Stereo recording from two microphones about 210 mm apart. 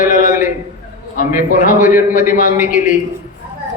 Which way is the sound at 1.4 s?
40° left (ahead or behind).